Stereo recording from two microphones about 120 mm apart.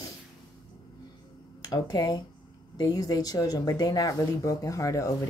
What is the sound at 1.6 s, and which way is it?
Speech, 35° left (ahead or behind).